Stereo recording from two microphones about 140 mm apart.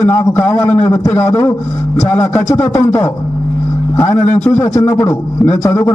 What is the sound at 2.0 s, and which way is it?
Music, 15° left (ahead or behind).